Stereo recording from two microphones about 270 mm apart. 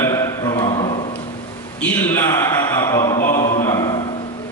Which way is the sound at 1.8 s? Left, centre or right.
Centre.